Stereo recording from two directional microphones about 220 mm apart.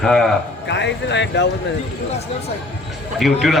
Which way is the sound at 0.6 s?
50° left (ahead or behind).